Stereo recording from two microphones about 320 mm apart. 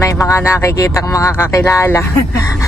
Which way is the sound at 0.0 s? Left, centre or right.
Centre.